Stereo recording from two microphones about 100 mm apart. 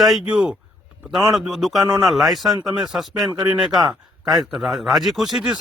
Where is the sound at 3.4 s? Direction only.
15° right (ahead or behind).